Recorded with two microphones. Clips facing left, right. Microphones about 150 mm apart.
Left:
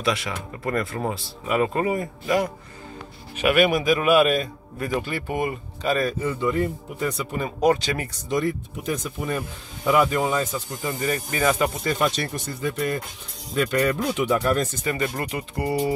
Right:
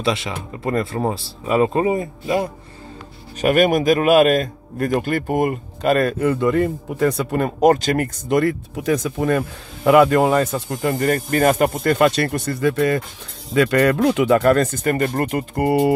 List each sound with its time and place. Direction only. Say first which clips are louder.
0.0 s speech: right 3 dB; 25° right (ahead or behind)
3.3 s speech: right 4 dB; 40° right (ahead or behind); by 7.7 s 65° right (ahead or behind)
7.7 s speech: right 7 dB; 45° right (ahead or behind); by 9.4 s 90° right
9.8 s speech: right 7 dB; 70° right (ahead or behind)
13.5 s speech: right 6 dB; 75° right (ahead or behind); by 15.9 s 55° right (ahead or behind)